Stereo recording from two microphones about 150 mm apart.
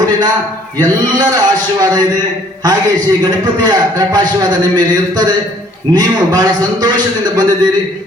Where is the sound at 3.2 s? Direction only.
30° right (ahead or behind).